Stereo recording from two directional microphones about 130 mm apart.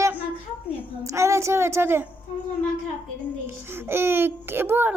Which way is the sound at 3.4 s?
20° right (ahead or behind).